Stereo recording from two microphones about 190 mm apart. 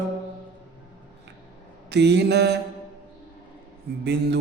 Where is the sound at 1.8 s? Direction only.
65° right (ahead or behind).